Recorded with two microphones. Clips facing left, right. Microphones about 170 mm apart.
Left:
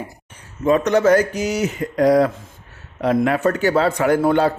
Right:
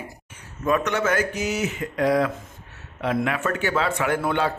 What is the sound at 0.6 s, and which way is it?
A man's voice, 35° left (ahead or behind).